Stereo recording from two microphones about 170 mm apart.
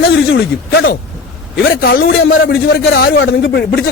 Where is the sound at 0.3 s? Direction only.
65° left (ahead or behind).